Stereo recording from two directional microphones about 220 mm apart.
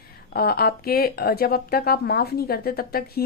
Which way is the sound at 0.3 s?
45° left (ahead or behind).